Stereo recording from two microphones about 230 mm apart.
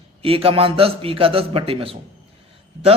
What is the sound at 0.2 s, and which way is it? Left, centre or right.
A man's voice, right.